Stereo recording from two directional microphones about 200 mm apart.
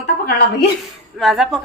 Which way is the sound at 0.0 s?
55° left (ahead or behind).